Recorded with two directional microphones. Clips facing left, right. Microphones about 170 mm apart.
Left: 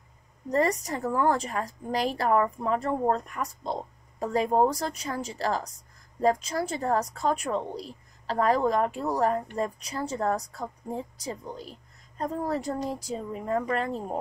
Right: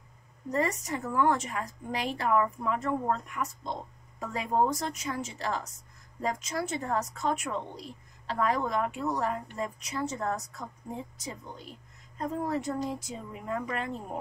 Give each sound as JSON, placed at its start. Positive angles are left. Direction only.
{"t": 0.5, "sound": "a woman's voice", "side_deg": 35}